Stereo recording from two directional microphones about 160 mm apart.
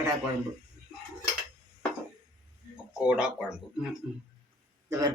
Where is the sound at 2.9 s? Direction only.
5° right (ahead or behind).